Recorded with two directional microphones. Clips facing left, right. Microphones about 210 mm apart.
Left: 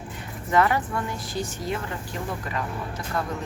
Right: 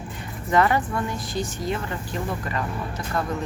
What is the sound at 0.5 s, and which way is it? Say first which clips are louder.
Speech: right 1 dB; 5° left (ahead or behind).